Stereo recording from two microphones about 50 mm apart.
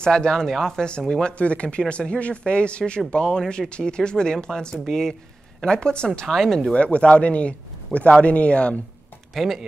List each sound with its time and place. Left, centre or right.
0.0 s speech: centre
1.4 s speech: left
6.2 s speech: centre
6.7 s speech: left
9.3 s speech: centre